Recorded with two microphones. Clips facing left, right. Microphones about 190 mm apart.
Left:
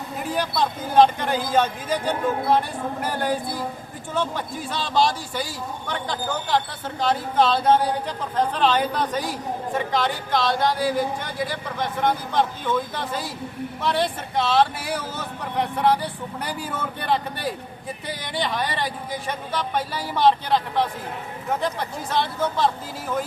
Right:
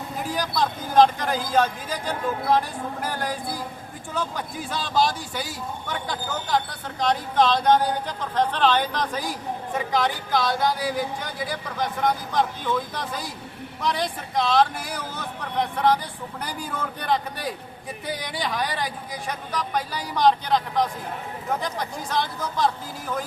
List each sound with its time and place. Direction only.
0.6 s speech: 5° left (ahead or behind)